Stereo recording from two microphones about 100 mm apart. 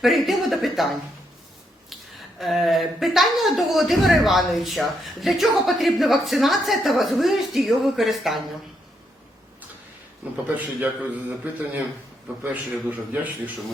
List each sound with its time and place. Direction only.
0.0 s speech: centre (ahead or behind)
2.4 s speech: centre (ahead or behind)
10.5 s a man's voice: 15° right (ahead or behind)